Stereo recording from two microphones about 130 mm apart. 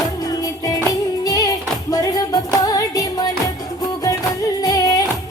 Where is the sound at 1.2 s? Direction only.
30° left (ahead or behind).